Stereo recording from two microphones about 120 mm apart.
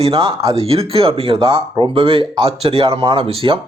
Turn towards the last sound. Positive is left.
turn(degrees=-50)  # may be behind; listen again after turning